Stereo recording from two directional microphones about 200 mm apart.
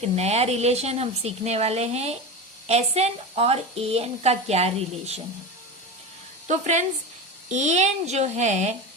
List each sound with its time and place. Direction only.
0.2 s a woman's voice: 30° right (ahead or behind)
6.5 s a woman's voice: 35° right (ahead or behind)